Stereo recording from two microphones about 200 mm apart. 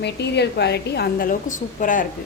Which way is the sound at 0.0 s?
55° left (ahead or behind).